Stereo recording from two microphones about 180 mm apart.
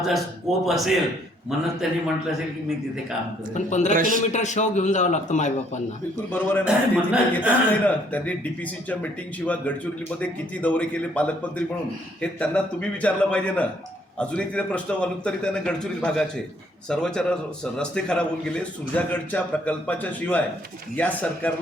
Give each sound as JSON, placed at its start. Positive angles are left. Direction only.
{"t": 0.1, "sound": "a man's voice", "side_deg": 0}
{"t": 3.5, "sound": "a man's voice", "side_deg": 40}
{"t": 3.9, "sound": "a man's voice", "side_deg": -50}
{"t": 4.3, "sound": "a man's voice", "side_deg": 40}
{"t": 6.7, "sound": "speech", "side_deg": -5}
{"t": 7.9, "sound": "a man's voice", "side_deg": 10}